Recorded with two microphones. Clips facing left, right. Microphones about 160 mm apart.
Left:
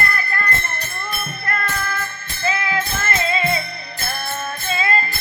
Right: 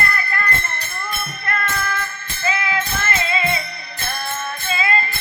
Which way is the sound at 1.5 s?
35° left (ahead or behind).